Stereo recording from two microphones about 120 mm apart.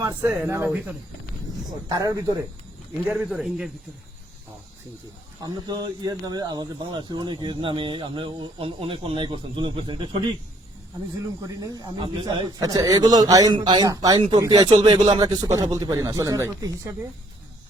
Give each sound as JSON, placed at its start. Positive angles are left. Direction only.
{"t": 0.0, "sound": "speech", "side_deg": -25}
{"t": 1.9, "sound": "speech", "side_deg": -30}
{"t": 3.1, "sound": "a man's voice", "side_deg": -5}
{"t": 5.4, "sound": "speech", "side_deg": -35}
{"t": 11.4, "sound": "a man's voice", "side_deg": -30}
{"t": 12.5, "sound": "a man's voice", "side_deg": -30}